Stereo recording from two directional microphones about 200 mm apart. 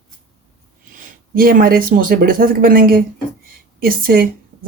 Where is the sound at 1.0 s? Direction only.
45° right (ahead or behind).